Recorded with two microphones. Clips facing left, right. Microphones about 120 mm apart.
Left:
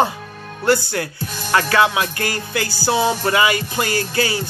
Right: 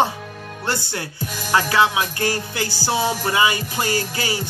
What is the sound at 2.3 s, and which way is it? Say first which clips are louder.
Music: left 1 dB; 55° left (ahead or behind).